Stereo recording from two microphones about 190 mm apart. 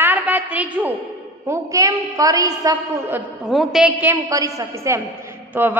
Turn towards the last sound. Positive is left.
turn(degrees=-10)  # may be behind; listen again after turning